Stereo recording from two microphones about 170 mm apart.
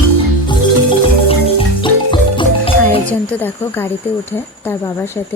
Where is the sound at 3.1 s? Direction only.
10° left (ahead or behind).